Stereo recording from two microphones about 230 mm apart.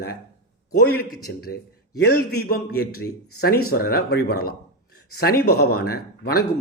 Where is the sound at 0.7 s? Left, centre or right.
Left.